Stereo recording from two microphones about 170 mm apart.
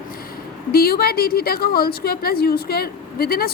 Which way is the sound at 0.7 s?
65° left (ahead or behind).